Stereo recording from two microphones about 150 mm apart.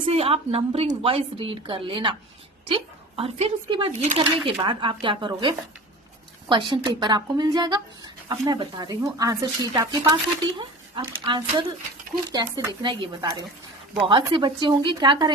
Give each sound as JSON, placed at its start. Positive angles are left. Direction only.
{"t": 0.0, "sound": "a woman's voice", "side_deg": -40}